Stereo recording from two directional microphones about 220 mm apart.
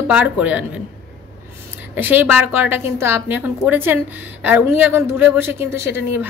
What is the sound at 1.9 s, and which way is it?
A woman's voice, 10° right (ahead or behind).